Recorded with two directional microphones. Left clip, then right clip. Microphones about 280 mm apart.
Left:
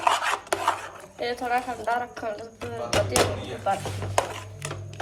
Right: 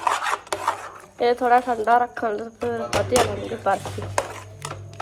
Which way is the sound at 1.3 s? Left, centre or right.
Right.